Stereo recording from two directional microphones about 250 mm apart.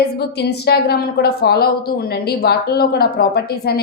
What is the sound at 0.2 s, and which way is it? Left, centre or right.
A woman's voice, left.